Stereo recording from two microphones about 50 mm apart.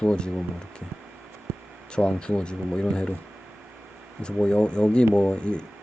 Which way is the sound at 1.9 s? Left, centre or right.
Centre.